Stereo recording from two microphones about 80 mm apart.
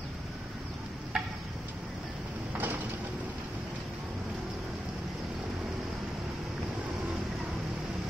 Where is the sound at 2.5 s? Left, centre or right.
Right.